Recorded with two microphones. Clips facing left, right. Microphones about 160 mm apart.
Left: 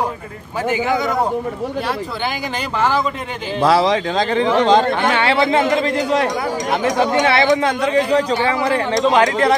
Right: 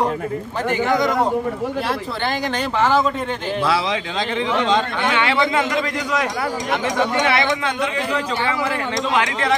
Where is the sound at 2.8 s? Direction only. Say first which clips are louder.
Right 1 dB; centre (ahead or behind).